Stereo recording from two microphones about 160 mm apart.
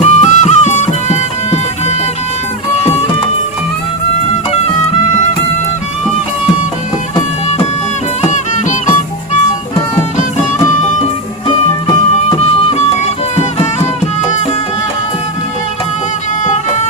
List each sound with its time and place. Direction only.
0.0 s music: 45° left (ahead or behind)
8.2 s music: 50° left (ahead or behind)
10.8 s music: 40° left (ahead or behind)
16.4 s music: 50° left (ahead or behind)